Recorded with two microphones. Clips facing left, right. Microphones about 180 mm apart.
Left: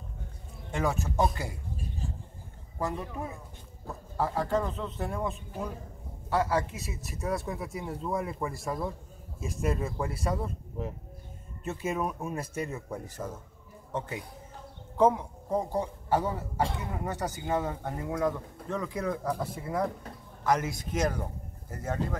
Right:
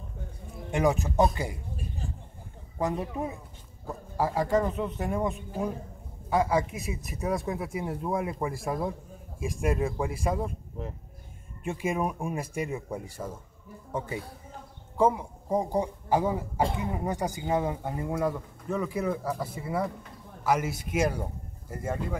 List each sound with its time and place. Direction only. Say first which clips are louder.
0.7 s speech: right 5 dB; 15° right (ahead or behind)
2.8 s speech: right 4 dB; 20° right (ahead or behind)
11.6 s speech: right 2 dB; 10° right (ahead or behind)
15.0 s speech: left 1 dB; 10° right (ahead or behind)